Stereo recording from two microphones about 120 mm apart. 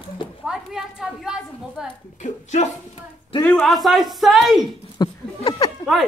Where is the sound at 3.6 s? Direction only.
Centre (ahead or behind).